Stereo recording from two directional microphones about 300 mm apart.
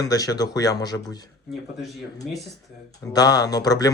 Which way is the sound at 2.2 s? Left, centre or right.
Centre.